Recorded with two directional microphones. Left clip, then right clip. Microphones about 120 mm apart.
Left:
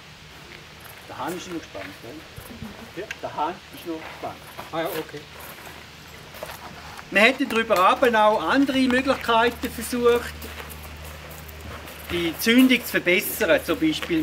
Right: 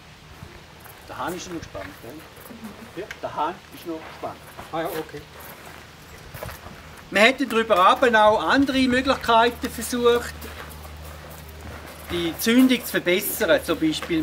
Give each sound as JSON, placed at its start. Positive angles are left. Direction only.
{"t": 3.2, "sound": "speech", "side_deg": -25}
{"t": 4.7, "sound": "speech", "side_deg": 0}
{"t": 7.1, "sound": "speech", "side_deg": -25}
{"t": 12.1, "sound": "speech", "side_deg": -15}